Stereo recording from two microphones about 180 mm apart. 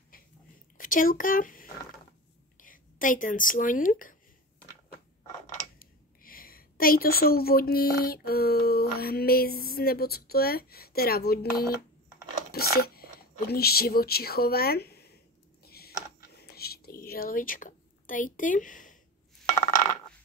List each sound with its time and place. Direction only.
0.7 s speech: 50° left (ahead or behind)
5.8 s speech: 55° left (ahead or behind)
15.6 s a sound: 60° left (ahead or behind)